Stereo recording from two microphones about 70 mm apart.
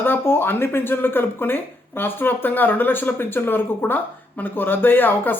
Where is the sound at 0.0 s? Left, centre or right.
Left.